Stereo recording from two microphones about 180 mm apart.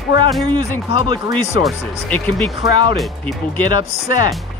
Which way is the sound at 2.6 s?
25° right (ahead or behind).